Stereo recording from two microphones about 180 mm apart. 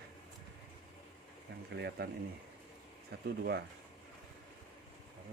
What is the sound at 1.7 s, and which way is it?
Speech, 70° right (ahead or behind).